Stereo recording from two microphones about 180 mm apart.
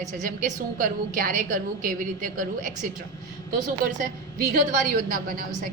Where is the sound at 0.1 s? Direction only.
45° right (ahead or behind).